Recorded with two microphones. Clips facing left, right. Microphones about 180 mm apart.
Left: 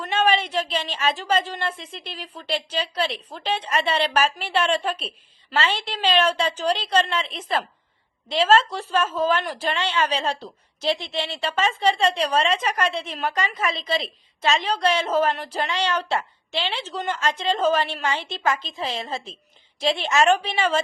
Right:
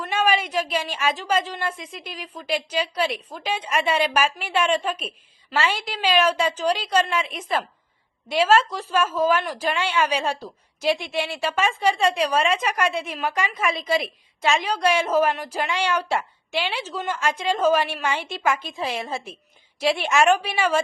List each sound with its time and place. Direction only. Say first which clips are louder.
0.0 s a sound: left 1 dB; 5° right (ahead or behind)
0.4 s a woman's voice: right 1 dB; 5° right (ahead or behind)
1.8 s speech: right 1 dB; 30° left (ahead or behind)
2.2 s a woman's voice: right 2 dB; 10° right (ahead or behind)
13.6 s a woman's voice: right 2 dB; 25° left (ahead or behind)
14.7 s a woman's voice: right 2 dB; 10° right (ahead or behind)